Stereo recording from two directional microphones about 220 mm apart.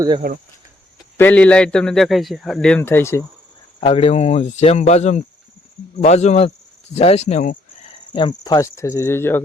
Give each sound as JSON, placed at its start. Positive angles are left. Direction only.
{"t": 0.2, "sound": "speech", "side_deg": -45}
{"t": 1.1, "sound": "a man's voice", "side_deg": 5}
{"t": 3.8, "sound": "speech", "side_deg": 25}
{"t": 8.1, "sound": "speech", "side_deg": 20}